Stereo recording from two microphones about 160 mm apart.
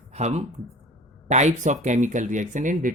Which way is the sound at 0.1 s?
45° right (ahead or behind).